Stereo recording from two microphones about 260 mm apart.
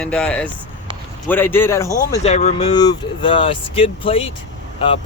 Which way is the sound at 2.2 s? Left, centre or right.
Left.